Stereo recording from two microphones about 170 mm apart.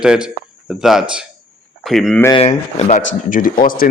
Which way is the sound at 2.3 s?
40° left (ahead or behind).